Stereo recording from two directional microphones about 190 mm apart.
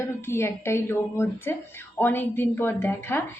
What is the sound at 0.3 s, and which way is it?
A woman's voice, 15° left (ahead or behind).